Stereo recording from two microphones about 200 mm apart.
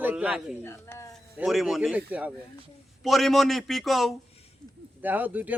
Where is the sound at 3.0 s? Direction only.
Centre (ahead or behind).